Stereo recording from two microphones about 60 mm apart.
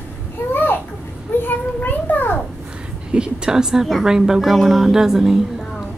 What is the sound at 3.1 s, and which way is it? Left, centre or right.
A woman's voice, centre.